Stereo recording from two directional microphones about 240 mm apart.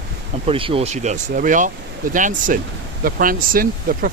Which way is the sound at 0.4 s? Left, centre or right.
Right.